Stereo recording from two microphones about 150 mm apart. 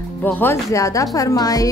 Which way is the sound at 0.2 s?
15° left (ahead or behind).